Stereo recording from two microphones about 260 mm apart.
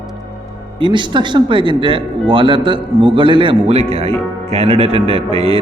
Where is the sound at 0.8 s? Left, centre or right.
Centre.